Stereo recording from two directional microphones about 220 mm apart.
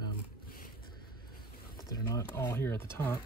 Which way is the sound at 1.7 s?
15° left (ahead or behind).